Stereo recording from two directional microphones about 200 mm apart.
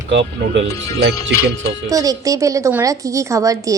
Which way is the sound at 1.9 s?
15° right (ahead or behind).